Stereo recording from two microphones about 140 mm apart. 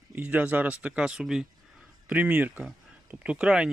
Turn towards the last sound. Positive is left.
turn(degrees=-5)  # may be behind; listen again after turning